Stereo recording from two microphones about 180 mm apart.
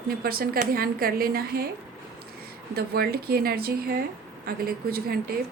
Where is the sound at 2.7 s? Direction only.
60° right (ahead or behind).